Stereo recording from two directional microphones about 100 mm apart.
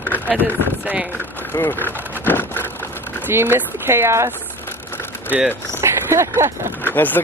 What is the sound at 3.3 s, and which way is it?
Speech, 25° right (ahead or behind).